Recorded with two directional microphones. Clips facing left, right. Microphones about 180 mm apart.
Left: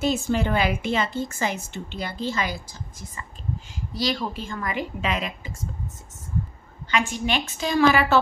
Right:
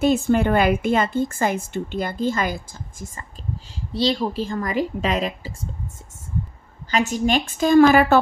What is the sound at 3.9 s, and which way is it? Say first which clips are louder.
A woman's voice: right 5 dB; 30° right (ahead or behind).